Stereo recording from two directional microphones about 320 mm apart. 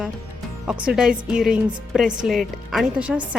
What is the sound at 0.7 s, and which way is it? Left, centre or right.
A woman's voice, centre.